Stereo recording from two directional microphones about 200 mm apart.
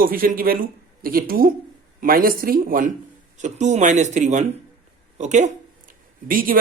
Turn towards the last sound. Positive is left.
turn(degrees=-45)  # may be behind; listen again after turning